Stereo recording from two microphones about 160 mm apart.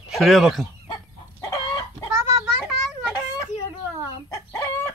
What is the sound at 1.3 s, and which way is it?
Chicken, 20° left (ahead or behind).